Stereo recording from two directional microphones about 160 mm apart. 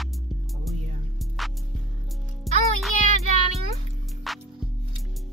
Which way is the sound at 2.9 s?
50° left (ahead or behind).